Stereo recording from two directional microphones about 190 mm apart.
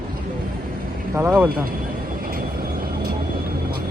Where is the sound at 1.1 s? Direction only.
10° right (ahead or behind).